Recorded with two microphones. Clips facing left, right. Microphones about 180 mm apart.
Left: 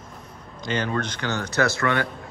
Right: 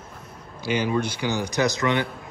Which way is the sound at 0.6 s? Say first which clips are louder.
Right 2 dB; 10° right (ahead or behind).